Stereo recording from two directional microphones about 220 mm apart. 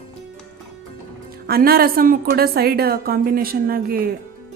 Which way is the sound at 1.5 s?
45° right (ahead or behind).